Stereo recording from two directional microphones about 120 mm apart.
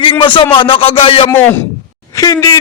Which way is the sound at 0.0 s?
45° left (ahead or behind).